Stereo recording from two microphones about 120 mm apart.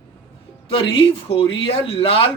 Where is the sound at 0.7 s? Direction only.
45° left (ahead or behind).